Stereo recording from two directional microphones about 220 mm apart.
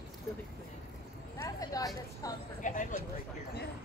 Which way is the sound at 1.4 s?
15° left (ahead or behind).